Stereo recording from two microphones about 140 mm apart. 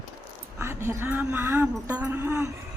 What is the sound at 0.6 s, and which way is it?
Speech, 20° right (ahead or behind).